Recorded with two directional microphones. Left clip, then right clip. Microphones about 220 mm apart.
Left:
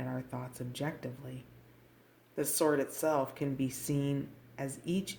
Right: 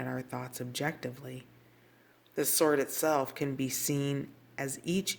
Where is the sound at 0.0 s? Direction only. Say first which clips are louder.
Right 3 dB; 45° right (ahead or behind).